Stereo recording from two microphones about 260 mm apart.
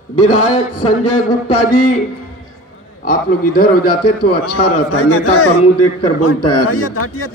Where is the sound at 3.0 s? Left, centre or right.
Left.